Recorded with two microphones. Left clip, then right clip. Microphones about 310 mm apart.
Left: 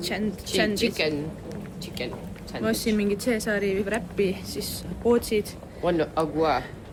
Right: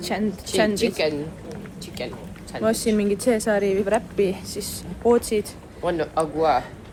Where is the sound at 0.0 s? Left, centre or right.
Centre.